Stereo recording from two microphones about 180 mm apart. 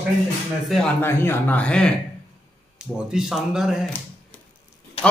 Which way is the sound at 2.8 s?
5° right (ahead or behind).